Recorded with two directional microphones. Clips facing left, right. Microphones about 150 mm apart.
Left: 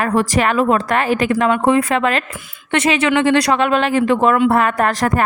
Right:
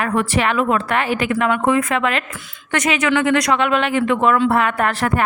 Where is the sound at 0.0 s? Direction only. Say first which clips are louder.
Left 3 dB; 35° left (ahead or behind).